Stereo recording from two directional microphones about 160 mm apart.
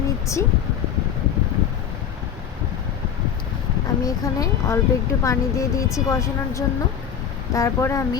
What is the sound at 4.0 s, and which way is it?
A woman's voice, 20° left (ahead or behind).